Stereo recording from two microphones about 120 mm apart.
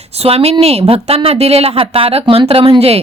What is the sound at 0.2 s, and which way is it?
A woman's voice, 55° right (ahead or behind).